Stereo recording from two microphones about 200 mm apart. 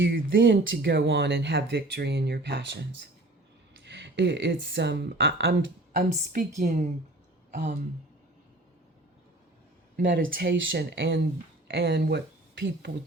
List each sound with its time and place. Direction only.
0.0 s speech: 70° right (ahead or behind)
0.3 s speech: 55° right (ahead or behind)
3.8 s speech: 60° right (ahead or behind)
6.0 s a woman's voice: 35° right (ahead or behind)
7.5 s a sound: 40° right (ahead or behind)
10.2 s speech: 50° right (ahead or behind)